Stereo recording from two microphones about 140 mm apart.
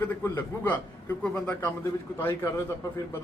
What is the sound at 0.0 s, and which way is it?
A man's voice, 15° left (ahead or behind).